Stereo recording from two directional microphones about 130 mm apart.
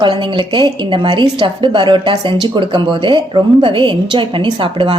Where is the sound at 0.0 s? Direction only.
40° right (ahead or behind).